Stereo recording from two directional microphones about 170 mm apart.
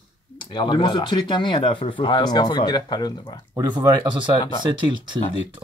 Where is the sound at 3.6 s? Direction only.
25° right (ahead or behind).